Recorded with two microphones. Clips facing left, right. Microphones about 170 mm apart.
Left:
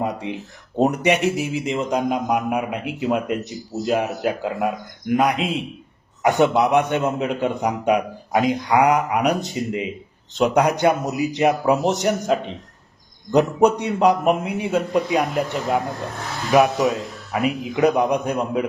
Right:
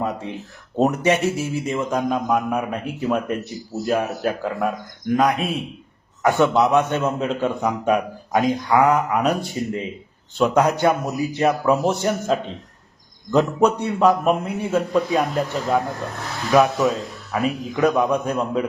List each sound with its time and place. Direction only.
0.0 s a sound: 15° left (ahead or behind)
0.8 s a man's voice: 15° left (ahead or behind)
16.6 s a man's voice: 20° left (ahead or behind)